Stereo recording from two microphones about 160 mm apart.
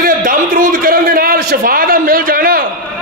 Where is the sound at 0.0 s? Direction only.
60° right (ahead or behind).